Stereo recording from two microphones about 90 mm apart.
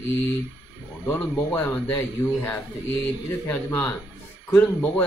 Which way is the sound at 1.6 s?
15° left (ahead or behind).